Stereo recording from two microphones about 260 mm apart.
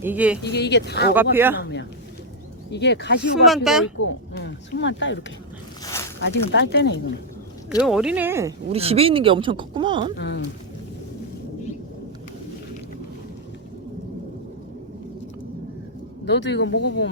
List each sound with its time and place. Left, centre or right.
0.0 s speech: centre
0.4 s speech: left
1.1 s speech: centre
2.7 s speech: left
3.4 s speech: centre
3.9 s speech: left
5.8 s a sound: centre
6.2 s speech: left
7.8 s speech: centre
8.7 s speech: right
10.2 s speech: left
16.2 s speech: left